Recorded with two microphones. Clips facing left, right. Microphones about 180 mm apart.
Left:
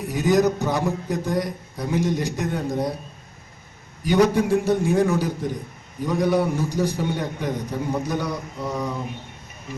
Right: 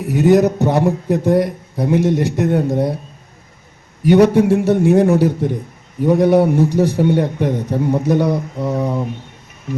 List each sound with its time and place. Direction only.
0.1 s a man's voice: 65° right (ahead or behind)
4.0 s a man's voice: 65° right (ahead or behind)